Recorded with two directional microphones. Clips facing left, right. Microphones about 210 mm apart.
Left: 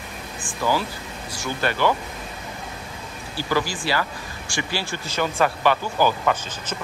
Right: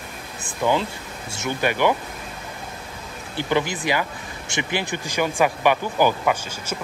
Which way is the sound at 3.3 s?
20° right (ahead or behind).